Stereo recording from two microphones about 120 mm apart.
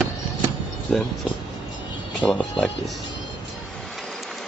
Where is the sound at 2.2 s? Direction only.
10° left (ahead or behind).